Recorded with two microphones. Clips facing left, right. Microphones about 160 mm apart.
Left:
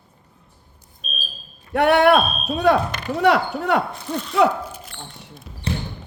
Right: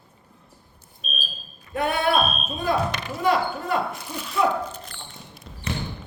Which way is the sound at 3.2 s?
75° left (ahead or behind).